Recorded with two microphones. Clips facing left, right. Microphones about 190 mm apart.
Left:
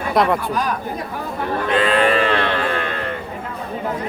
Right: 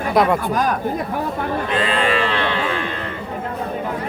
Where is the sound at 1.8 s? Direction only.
55° left (ahead or behind).